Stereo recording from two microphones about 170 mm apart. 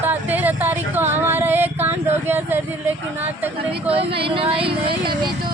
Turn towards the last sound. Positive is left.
turn(degrees=-30)  # may be behind; listen again after turning